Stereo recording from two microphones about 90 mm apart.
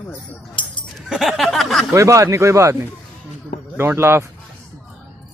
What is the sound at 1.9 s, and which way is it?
A man's voice, 35° right (ahead or behind).